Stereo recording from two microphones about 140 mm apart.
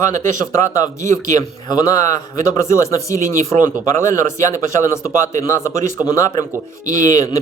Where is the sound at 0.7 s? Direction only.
25° left (ahead or behind).